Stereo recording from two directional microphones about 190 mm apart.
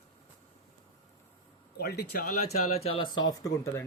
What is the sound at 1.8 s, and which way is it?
Speech, 55° left (ahead or behind).